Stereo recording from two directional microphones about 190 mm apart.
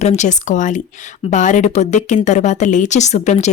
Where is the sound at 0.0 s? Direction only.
35° left (ahead or behind).